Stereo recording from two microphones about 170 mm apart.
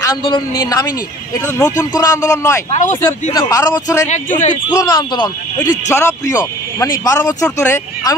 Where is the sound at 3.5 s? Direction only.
20° left (ahead or behind).